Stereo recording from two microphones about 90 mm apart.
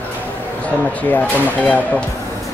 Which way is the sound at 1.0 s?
20° left (ahead or behind).